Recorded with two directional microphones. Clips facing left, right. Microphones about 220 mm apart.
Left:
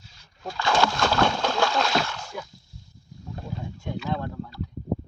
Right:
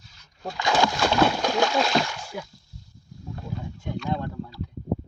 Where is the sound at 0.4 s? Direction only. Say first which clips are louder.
Even; 15° right (ahead or behind).